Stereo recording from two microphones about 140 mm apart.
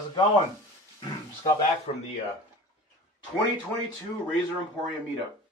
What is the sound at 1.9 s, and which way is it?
Speech, 50° left (ahead or behind).